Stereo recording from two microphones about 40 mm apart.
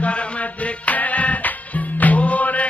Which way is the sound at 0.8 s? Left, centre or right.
Left.